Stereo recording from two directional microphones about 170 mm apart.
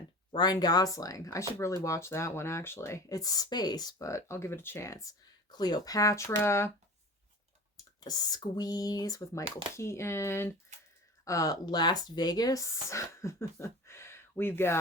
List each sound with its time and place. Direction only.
0.3 s speech: 25° left (ahead or behind)
7.8 s speech: 20° left (ahead or behind)
9.4 s speech: 30° right (ahead or behind)
9.7 s speech: 15° left (ahead or behind)